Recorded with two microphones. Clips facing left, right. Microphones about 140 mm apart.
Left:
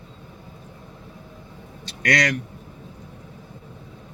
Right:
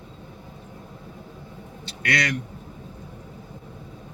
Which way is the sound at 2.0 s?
40° left (ahead or behind).